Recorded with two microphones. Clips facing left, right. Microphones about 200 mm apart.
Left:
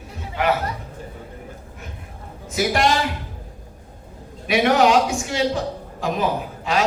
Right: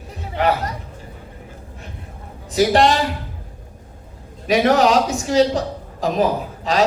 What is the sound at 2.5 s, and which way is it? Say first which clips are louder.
Speech: right 5 dB; 35° right (ahead or behind).